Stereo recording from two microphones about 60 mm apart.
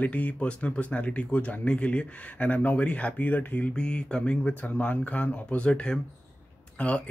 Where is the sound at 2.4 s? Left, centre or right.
Left.